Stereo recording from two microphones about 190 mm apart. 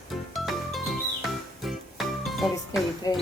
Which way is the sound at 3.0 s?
20° left (ahead or behind).